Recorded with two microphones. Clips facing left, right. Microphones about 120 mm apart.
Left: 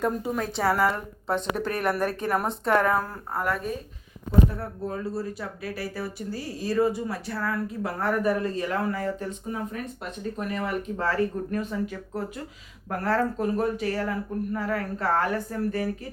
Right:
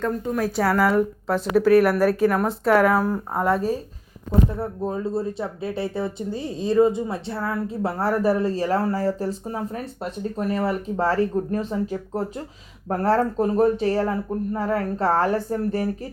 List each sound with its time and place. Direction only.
0.3 s speech: 5° right (ahead or behind)
3.4 s speech: 30° right (ahead or behind)